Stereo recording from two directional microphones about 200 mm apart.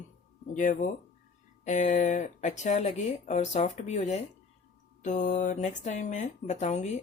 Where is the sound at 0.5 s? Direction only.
40° left (ahead or behind).